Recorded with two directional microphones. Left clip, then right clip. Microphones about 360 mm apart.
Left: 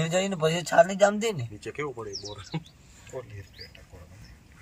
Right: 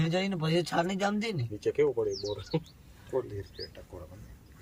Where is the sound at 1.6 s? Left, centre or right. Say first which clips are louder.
Right 7 dB; centre.